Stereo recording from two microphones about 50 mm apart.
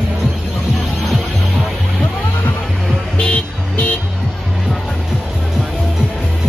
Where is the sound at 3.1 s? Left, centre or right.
Left.